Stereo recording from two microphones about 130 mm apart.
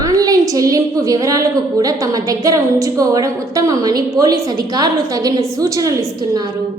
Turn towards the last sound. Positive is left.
turn(degrees=-30)  # may be behind; listen again after turning